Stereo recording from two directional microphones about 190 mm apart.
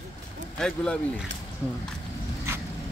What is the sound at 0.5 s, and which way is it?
Speech, 5° left (ahead or behind).